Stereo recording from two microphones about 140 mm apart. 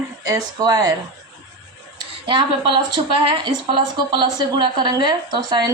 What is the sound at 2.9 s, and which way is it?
A woman's voice, 35° right (ahead or behind).